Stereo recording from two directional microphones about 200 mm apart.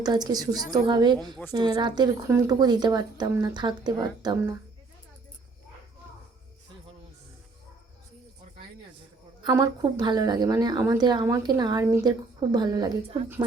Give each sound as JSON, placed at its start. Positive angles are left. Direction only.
{"t": 0.0, "sound": "speech", "side_deg": -20}
{"t": 9.4, "sound": "speech", "side_deg": -20}